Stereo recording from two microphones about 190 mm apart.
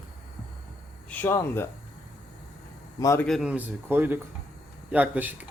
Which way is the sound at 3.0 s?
15° left (ahead or behind).